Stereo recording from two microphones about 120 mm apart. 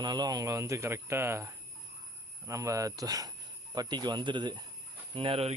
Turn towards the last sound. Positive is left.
turn(degrees=-55)  # may be behind; listen again after turning